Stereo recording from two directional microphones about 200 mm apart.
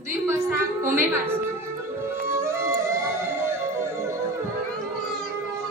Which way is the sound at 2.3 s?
15° right (ahead or behind).